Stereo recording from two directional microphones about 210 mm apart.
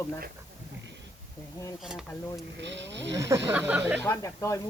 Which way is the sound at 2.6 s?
55° right (ahead or behind).